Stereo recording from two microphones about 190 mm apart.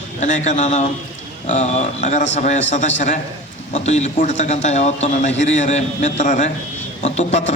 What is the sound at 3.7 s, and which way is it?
A man's voice, 35° left (ahead or behind).